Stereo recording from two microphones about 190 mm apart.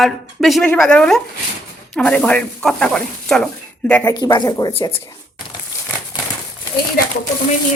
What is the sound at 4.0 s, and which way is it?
Speech, 20° left (ahead or behind).